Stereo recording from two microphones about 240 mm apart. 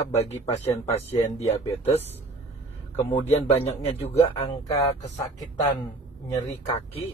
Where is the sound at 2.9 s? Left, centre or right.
Left.